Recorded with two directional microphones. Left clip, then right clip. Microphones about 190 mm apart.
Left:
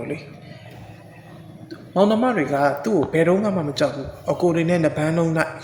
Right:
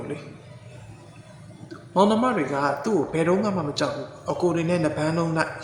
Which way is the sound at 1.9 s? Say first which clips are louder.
Left 2 dB; 15° left (ahead or behind).